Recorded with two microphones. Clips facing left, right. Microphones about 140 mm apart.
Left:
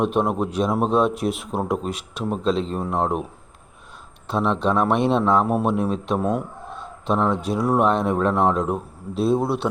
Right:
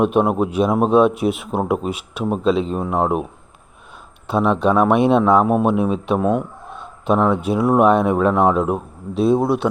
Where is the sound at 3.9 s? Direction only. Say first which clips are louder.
Right 4 dB; 60° right (ahead or behind).